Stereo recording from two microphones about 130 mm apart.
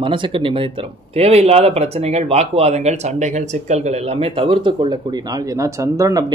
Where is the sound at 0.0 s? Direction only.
40° right (ahead or behind).